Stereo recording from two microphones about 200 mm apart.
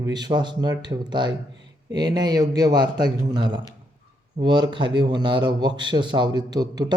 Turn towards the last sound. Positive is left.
turn(degrees=-20)  # may be behind; listen again after turning